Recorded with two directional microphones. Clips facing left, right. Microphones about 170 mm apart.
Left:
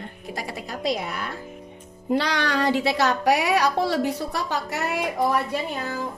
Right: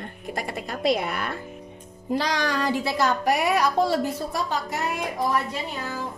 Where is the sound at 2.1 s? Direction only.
65° left (ahead or behind).